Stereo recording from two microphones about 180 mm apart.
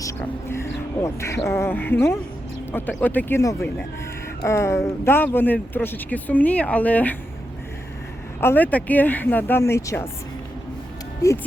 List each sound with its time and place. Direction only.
0.0 s speech: 15° left (ahead or behind)
8.4 s speech: 10° left (ahead or behind)